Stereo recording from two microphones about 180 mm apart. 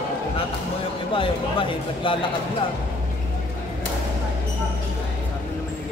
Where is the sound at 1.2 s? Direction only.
30° left (ahead or behind).